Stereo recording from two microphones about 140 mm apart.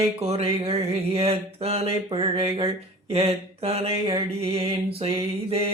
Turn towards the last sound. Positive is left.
turn(degrees=-45)  # may be behind; listen again after turning